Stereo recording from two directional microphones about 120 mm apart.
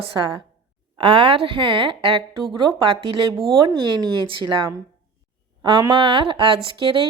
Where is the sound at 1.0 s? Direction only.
50° right (ahead or behind).